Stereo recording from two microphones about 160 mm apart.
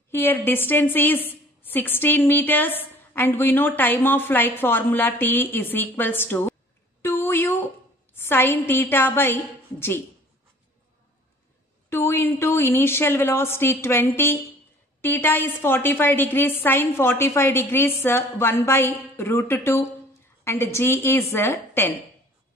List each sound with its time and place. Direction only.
0.1 s a woman's voice: 15° left (ahead or behind)
7.0 s a sound: 15° left (ahead or behind)
11.9 s a woman's voice: 15° left (ahead or behind)